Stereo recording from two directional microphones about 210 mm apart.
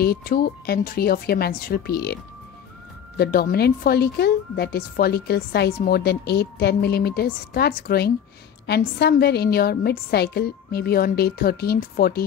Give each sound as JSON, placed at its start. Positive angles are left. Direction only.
{"t": 0.0, "sound": "a woman's voice", "side_deg": 45}
{"t": 3.2, "sound": "a woman's voice", "side_deg": 45}